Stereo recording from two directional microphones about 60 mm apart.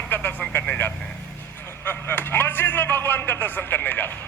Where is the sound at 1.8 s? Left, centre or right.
Left.